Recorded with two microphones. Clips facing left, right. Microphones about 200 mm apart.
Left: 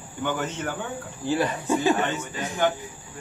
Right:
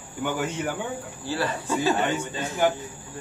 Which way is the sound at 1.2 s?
20° left (ahead or behind).